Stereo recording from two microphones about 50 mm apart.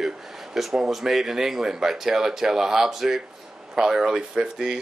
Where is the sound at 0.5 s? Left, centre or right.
Centre.